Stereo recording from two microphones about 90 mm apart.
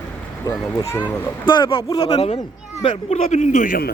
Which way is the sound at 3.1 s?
90° left.